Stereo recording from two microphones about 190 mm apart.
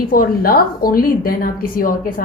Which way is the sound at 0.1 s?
50° left (ahead or behind).